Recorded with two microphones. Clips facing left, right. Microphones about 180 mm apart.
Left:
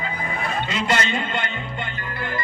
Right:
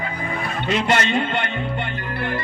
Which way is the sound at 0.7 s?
60° right (ahead or behind).